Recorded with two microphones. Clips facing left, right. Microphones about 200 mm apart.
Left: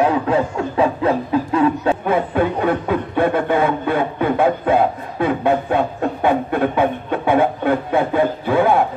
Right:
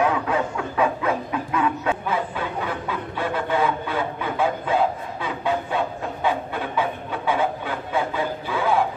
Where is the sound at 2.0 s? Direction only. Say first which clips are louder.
Left 9 dB; 55° left (ahead or behind).